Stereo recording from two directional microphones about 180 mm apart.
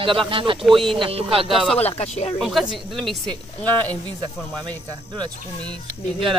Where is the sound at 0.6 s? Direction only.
Centre (ahead or behind).